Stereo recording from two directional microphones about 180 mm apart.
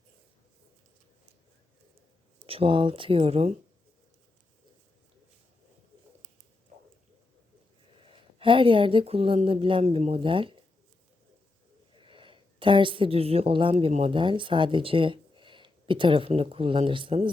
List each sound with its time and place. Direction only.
2.5 s speech: 30° right (ahead or behind)
8.4 s speech: 30° right (ahead or behind)
11.9 s a woman's voice: 25° right (ahead or behind)